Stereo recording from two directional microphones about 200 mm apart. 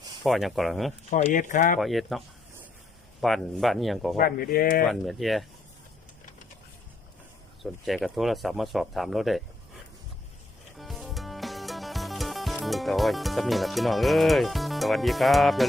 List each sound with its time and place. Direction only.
0.2 s speech: centre (ahead or behind)
1.1 s speech: 40° left (ahead or behind)
1.8 s speech: centre (ahead or behind)
4.2 s speech: 45° left (ahead or behind)
4.9 s speech: centre (ahead or behind)
7.6 s speech: centre (ahead or behind)
10.8 s music: centre (ahead or behind)